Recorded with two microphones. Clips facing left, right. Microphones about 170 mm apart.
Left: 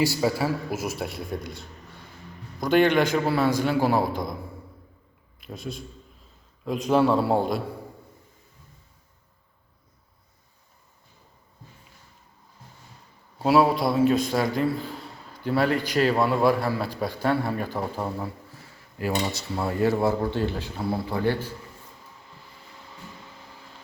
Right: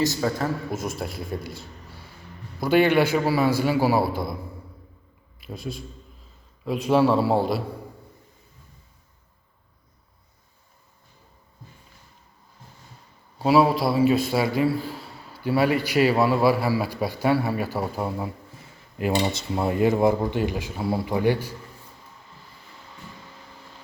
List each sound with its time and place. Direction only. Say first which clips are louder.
0.0 s a man's voice: left 1 dB; 10° left (ahead or behind); by 4.4 s 5° right (ahead or behind)
5.4 s a man's voice: right 1 dB; centre (ahead or behind)
13.4 s a man's voice: right 1 dB; centre (ahead or behind)